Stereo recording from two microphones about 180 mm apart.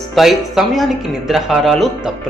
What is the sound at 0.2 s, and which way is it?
Speech, centre (ahead or behind).